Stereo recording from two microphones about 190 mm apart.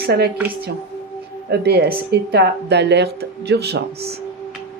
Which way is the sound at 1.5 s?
60° right (ahead or behind).